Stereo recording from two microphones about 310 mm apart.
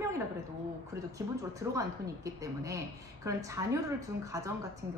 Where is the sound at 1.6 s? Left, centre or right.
Centre.